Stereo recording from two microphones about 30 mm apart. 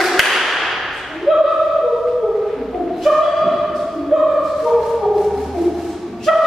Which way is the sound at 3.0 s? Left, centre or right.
Centre.